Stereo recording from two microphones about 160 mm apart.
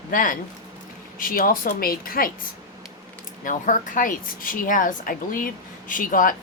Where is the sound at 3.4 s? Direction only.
55° left (ahead or behind).